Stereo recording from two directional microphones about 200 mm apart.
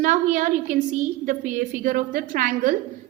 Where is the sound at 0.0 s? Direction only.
40° right (ahead or behind).